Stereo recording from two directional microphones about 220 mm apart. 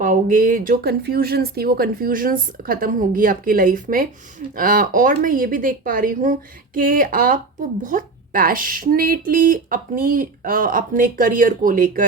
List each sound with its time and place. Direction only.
0.0 s speech: 35° right (ahead or behind)